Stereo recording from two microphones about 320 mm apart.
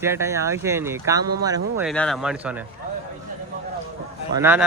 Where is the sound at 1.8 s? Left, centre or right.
Centre.